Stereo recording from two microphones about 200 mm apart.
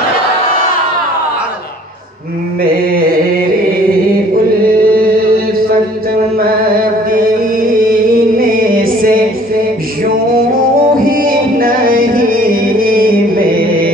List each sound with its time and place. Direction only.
2.6 s carnatic music: 50° right (ahead or behind)
4.6 s chant: 45° right (ahead or behind)
6.3 s music: 50° right (ahead or behind)
10.3 s music: 45° right (ahead or behind)